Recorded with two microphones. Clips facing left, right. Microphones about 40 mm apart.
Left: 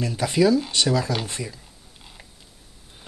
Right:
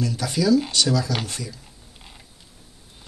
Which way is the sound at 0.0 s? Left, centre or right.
Left.